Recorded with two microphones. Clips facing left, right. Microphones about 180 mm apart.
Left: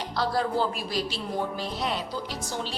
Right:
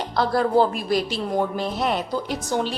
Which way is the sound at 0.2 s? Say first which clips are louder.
Right 7 dB; 50° right (ahead or behind).